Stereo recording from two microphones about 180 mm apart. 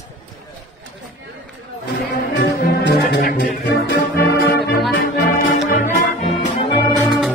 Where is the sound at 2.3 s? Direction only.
65° left (ahead or behind).